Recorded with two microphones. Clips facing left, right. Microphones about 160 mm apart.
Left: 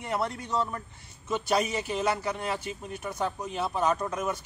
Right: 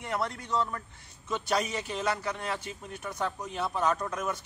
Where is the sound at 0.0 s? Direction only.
10° left (ahead or behind).